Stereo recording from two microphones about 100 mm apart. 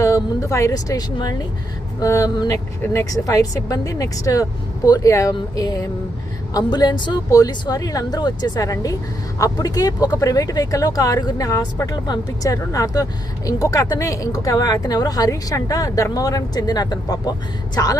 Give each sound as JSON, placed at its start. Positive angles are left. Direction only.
{"t": 0.0, "sound": "speech", "side_deg": 30}
{"t": 2.0, "sound": "a woman's voice", "side_deg": 30}
{"t": 7.3, "sound": "speech", "side_deg": 35}